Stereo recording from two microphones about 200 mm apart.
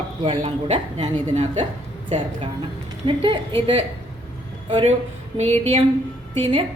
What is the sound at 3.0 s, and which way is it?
Speech, 25° right (ahead or behind).